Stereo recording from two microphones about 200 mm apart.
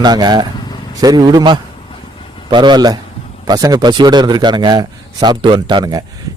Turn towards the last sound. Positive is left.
turn(degrees=-20)  # may be behind; listen again after turning